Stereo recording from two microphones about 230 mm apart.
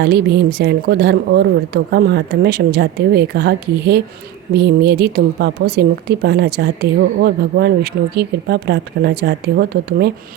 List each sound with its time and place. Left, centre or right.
0.0 s a woman's voice: right